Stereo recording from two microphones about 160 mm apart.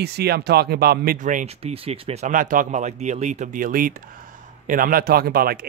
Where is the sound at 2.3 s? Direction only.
55° right (ahead or behind).